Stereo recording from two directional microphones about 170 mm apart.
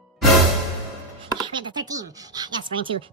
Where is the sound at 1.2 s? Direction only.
30° right (ahead or behind).